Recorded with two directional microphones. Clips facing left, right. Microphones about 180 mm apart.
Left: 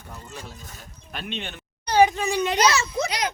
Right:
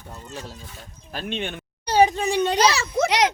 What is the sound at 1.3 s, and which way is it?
Speech, 50° right (ahead or behind).